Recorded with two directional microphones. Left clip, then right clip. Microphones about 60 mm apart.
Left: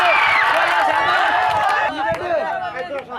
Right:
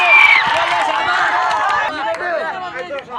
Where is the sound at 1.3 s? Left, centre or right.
Left.